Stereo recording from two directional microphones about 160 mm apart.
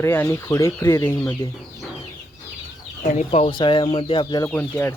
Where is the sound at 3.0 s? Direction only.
50° left (ahead or behind); by 4.4 s 25° left (ahead or behind).